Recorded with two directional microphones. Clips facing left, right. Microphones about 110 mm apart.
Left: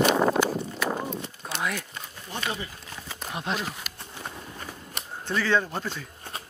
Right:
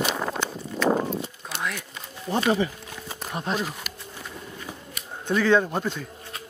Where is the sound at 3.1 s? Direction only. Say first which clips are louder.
Right 2 dB; 40° right (ahead or behind).